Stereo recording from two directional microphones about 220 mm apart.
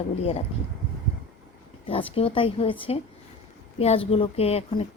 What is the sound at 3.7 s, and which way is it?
A woman's voice, 25° left (ahead or behind).